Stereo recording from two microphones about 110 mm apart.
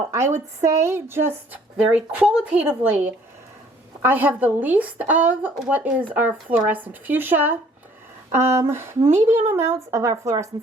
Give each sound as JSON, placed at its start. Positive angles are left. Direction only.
{"t": 0.6, "sound": "speech", "side_deg": -25}
{"t": 1.7, "sound": "speech", "side_deg": -10}